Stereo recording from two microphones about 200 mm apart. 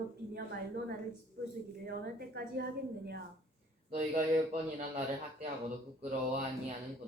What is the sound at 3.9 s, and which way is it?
Speech, 40° right (ahead or behind).